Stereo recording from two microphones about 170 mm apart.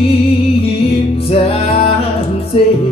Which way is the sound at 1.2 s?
35° left (ahead or behind).